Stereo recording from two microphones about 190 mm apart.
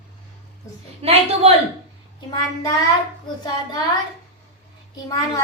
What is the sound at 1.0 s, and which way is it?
Speech, 30° right (ahead or behind).